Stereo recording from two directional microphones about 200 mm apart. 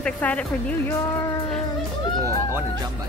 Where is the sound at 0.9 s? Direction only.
15° left (ahead or behind).